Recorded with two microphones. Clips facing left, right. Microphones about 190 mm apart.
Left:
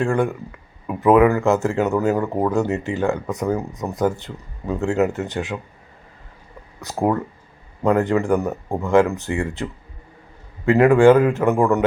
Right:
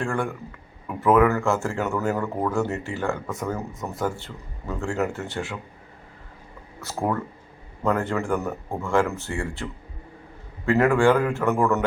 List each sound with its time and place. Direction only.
0.0 s speech: 20° left (ahead or behind)
6.8 s a man's voice: 15° left (ahead or behind)
10.7 s a man's voice: 15° left (ahead or behind)